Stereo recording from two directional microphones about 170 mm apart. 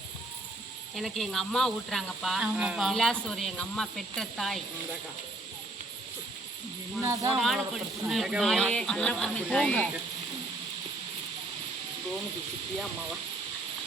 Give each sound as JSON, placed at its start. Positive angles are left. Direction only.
{"t": 0.9, "sound": "speech", "side_deg": 0}
{"t": 7.0, "sound": "speech", "side_deg": -20}
{"t": 7.3, "sound": "speech", "side_deg": 0}